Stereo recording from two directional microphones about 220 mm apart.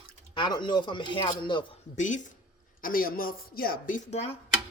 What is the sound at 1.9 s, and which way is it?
Speech, 35° left (ahead or behind).